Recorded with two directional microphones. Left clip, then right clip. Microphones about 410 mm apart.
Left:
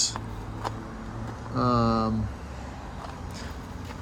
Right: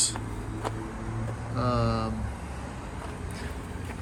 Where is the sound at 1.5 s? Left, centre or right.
Left.